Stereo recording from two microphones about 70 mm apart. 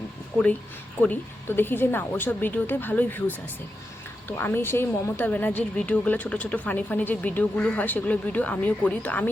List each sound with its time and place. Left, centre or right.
1.0 s speech: left
4.3 s a woman's voice: left
5.3 s speech: left